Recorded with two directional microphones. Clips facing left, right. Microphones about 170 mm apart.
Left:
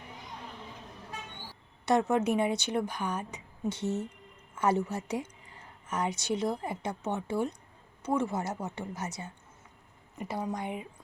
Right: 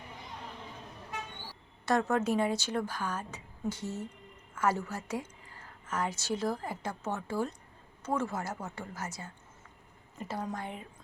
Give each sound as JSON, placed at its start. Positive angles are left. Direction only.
{"t": 1.8, "sound": "a woman's voice", "side_deg": 20}